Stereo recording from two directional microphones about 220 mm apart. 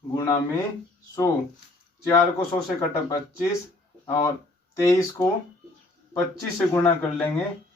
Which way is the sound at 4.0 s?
15° left (ahead or behind).